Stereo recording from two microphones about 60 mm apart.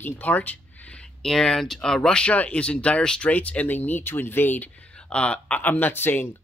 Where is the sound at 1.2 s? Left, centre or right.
Centre.